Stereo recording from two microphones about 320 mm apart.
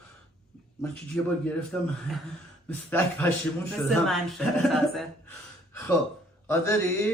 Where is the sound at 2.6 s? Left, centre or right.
Centre.